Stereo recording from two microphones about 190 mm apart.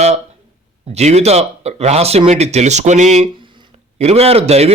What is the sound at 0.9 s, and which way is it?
A man's voice, 35° right (ahead or behind).